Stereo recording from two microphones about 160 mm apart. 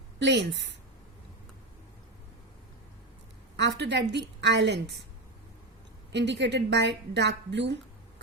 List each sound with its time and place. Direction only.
0.2 s a woman's voice: 90° right
3.6 s a woman's voice: 90° right
6.1 s a woman's voice: 90° right